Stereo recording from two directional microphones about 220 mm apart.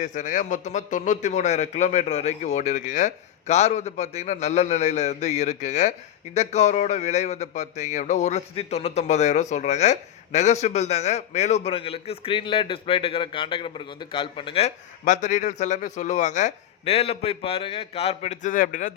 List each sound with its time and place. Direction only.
0.0 s speech: 35° left (ahead or behind)